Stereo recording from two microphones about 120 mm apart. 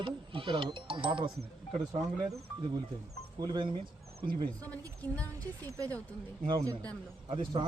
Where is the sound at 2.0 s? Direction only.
30° right (ahead or behind).